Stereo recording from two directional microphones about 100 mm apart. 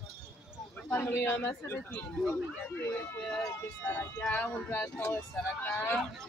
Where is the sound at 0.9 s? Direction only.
25° left (ahead or behind).